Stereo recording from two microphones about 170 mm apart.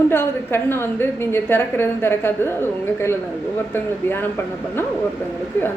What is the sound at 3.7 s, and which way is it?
Speech, 15° left (ahead or behind).